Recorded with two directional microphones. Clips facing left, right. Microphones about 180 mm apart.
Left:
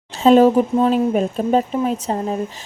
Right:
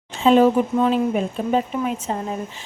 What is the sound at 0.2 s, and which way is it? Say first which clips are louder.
A woman's voice: left 3 dB; 40° left (ahead or behind).